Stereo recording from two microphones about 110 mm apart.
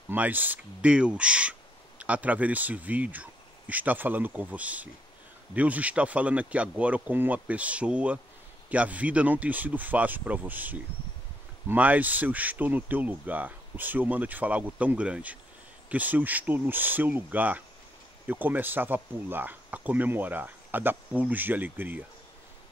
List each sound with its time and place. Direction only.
0.1 s speech: 15° right (ahead or behind)